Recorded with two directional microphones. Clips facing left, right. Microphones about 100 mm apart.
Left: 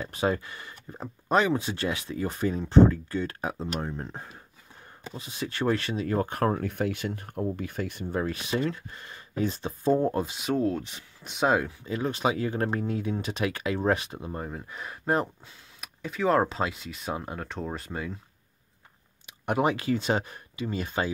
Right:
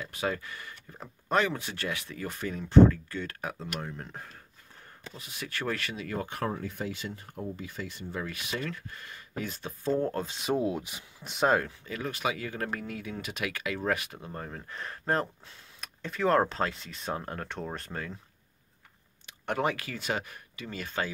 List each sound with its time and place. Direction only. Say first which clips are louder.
0.0 s speech: left 5 dB; 30° left (ahead or behind); by 8.2 s 55° left (ahead or behind)
8.2 s speech: left 7 dB; 30° left (ahead or behind); by 10.3 s 15° left (ahead or behind)
10.4 s speech: left 1 dB; 10° right (ahead or behind)
11.8 s speech: left 5 dB; 25° left (ahead or behind); by 18.1 s 5° left (ahead or behind)
19.2 s speech: left 4 dB; 15° left (ahead or behind)